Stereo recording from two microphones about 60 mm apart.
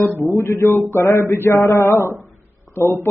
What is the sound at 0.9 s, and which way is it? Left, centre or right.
Speech, left.